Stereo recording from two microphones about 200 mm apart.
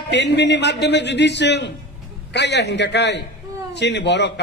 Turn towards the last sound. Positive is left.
turn(degrees=60)  # may be behind; listen again after turning